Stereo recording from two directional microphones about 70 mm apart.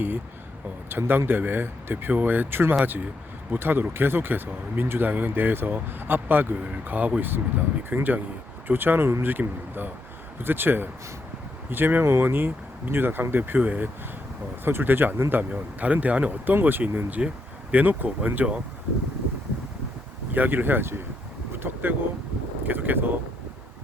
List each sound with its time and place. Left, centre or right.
0.9 s speech: right
17.1 s speech: centre
20.3 s speech: right
21.5 s wind: right
22.6 s speech: right